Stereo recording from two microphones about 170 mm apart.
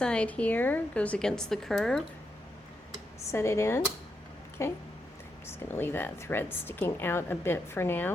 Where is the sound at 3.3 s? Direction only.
15° left (ahead or behind).